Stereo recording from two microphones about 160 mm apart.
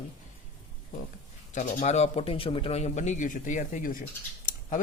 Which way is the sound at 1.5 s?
50° left (ahead or behind).